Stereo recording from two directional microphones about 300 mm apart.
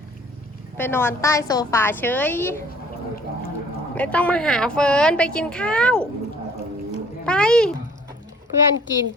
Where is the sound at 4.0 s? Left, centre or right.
Centre.